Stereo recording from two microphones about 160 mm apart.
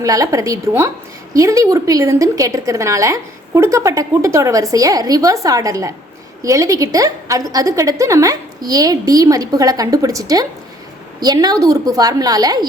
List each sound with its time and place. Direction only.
0.0 s a woman's voice: 20° right (ahead or behind)